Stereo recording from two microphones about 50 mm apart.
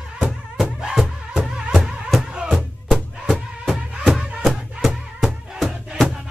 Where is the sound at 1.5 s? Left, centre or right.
Centre.